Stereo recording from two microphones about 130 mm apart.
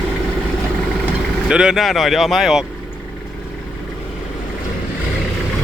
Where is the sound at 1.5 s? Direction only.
5° right (ahead or behind).